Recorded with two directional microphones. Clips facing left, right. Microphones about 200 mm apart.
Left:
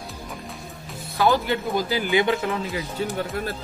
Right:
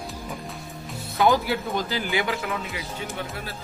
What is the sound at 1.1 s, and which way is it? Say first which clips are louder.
Speech: even; 15° right (ahead or behind).